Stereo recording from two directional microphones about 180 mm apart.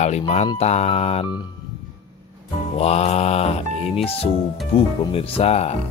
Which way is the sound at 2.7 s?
35° left (ahead or behind).